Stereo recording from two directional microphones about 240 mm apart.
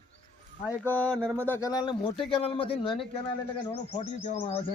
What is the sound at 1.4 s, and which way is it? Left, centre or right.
Speech, centre.